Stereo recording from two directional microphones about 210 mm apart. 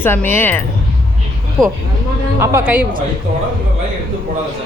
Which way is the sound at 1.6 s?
15° right (ahead or behind).